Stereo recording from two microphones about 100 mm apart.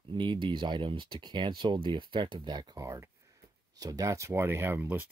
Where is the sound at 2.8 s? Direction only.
25° right (ahead or behind).